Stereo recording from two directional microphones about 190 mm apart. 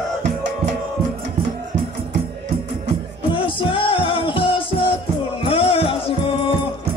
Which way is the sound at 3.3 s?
25° left (ahead or behind).